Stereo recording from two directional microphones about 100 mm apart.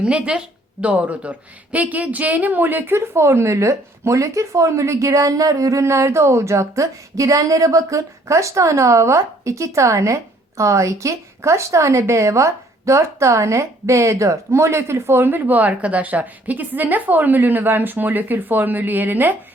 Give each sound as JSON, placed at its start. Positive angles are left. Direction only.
{"t": 0.0, "sound": "a woman's voice", "side_deg": -10}